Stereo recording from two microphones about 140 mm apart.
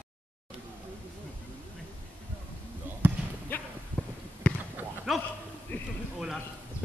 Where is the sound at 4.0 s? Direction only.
10° left (ahead or behind).